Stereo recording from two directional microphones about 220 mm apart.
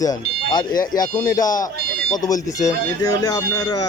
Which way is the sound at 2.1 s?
15° left (ahead or behind).